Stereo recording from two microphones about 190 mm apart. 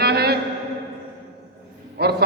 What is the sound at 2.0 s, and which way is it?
Speech, 60° right (ahead or behind).